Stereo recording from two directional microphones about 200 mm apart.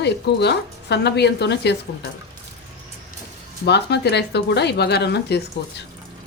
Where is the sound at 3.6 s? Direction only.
60° left (ahead or behind).